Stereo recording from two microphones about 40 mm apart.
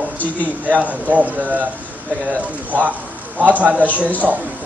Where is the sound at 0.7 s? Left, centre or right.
Right.